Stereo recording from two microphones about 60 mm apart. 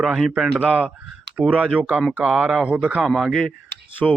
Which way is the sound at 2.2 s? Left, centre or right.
Centre.